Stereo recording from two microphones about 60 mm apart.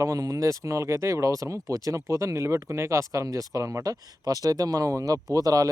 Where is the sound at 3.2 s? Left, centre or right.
Right.